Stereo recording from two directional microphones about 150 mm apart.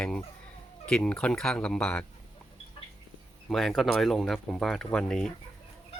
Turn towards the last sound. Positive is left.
turn(degrees=5)  # may be behind; listen again after turning